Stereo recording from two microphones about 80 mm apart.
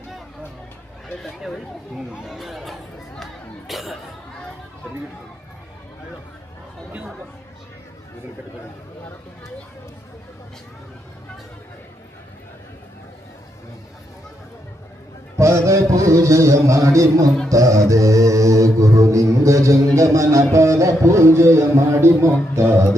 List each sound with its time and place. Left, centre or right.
1.2 s speech: centre
15.4 s music: right
17.5 s mantra: right